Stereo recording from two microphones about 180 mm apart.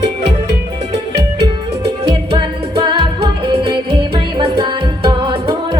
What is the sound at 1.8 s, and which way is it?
Music, 30° right (ahead or behind).